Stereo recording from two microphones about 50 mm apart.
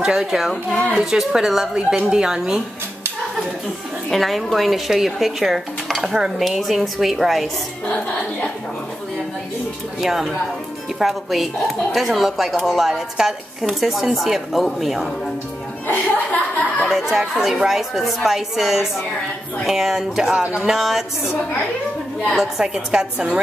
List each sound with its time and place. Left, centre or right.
0.0 s a woman's voice: centre
4.1 s speech: centre
7.8 s music: left
10.0 s speech: centre
15.9 s speech: left
16.9 s a woman's voice: centre
22.3 s a woman's voice: centre